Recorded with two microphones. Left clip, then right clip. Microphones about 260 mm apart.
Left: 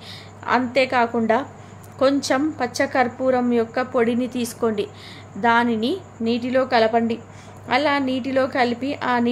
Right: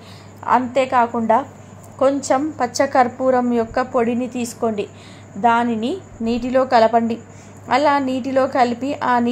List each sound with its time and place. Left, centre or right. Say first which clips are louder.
0.5 s a woman's voice: right 3 dB; centre
4.3 s a woman's voice: right 1 dB; left
4.6 s a woman's voice: right 1 dB; centre